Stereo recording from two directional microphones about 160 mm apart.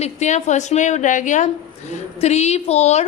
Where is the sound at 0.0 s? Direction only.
45° left (ahead or behind).